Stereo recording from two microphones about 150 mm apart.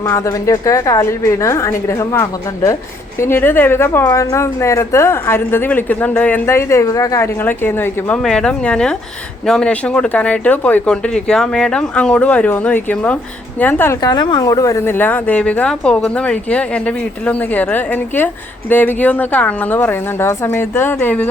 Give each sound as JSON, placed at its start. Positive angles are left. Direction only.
{"t": 0.0, "sound": "a woman's voice", "side_deg": 20}
{"t": 14.0, "sound": "a woman's voice", "side_deg": 30}